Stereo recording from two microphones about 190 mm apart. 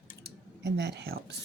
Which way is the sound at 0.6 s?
65° right (ahead or behind).